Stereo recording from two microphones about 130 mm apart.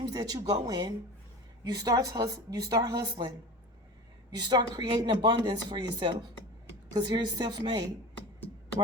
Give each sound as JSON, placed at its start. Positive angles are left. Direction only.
{"t": 0.0, "sound": "a woman's voice", "side_deg": -30}
{"t": 4.4, "sound": "speech", "side_deg": -35}